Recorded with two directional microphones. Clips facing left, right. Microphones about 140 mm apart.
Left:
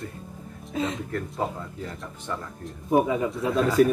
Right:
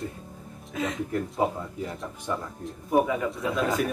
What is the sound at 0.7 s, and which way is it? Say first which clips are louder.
Speech: left 2 dB; 30° left (ahead or behind).